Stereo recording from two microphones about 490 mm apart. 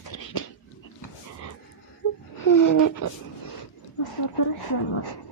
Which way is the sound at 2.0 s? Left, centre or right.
Left.